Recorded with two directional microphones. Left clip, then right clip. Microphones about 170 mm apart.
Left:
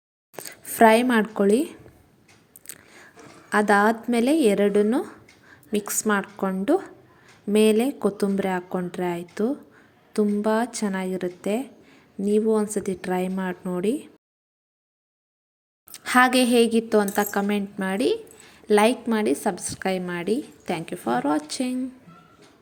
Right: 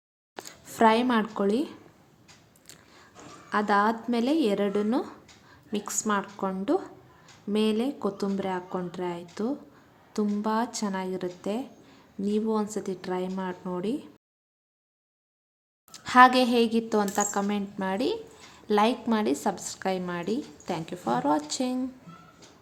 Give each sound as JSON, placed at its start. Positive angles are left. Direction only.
{"t": 0.4, "sound": "speech", "side_deg": 15}
{"t": 2.6, "sound": "biting", "side_deg": 25}
{"t": 3.5, "sound": "a woman's voice", "side_deg": 25}
{"t": 15.9, "sound": "a woman's voice", "side_deg": 20}